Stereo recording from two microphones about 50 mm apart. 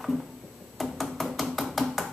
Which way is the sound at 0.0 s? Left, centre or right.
Centre.